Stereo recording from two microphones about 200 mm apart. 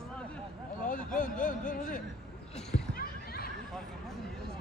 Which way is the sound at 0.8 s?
40° left (ahead or behind).